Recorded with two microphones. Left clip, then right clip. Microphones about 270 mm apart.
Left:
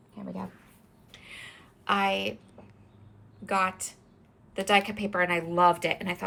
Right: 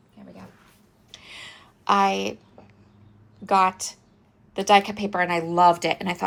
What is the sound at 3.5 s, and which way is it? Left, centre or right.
A woman's voice, centre.